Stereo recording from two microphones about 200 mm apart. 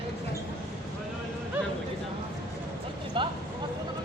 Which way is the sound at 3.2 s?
25° right (ahead or behind).